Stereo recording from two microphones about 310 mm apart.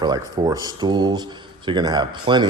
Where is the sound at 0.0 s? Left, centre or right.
Centre.